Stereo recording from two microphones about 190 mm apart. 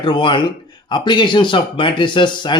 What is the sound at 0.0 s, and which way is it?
Speech, 25° left (ahead or behind).